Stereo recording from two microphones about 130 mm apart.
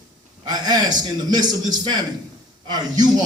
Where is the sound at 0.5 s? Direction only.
30° right (ahead or behind).